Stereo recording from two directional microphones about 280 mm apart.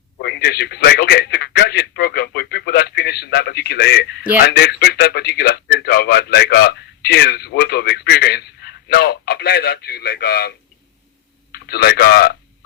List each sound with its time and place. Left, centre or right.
0.2 s speech: left
11.5 s speech: left